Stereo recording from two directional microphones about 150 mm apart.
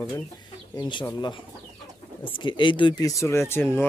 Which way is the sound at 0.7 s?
30° left (ahead or behind).